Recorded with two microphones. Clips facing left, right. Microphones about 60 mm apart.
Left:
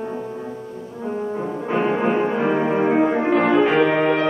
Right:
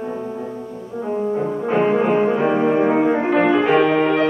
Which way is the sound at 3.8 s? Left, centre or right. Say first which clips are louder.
Right 1 dB; centre.